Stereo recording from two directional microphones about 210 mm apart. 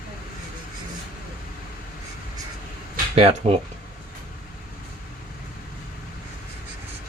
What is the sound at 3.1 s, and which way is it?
Speech, 30° right (ahead or behind).